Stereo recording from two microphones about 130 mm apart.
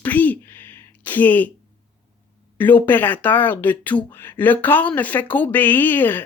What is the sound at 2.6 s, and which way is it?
Speech, 15° left (ahead or behind).